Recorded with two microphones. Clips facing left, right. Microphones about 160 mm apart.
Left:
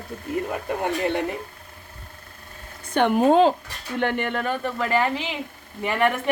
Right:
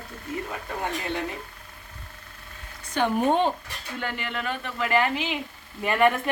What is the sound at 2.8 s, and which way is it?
Speech, 60° left (ahead or behind).